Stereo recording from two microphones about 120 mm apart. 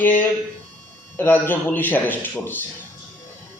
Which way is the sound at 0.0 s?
15° left (ahead or behind).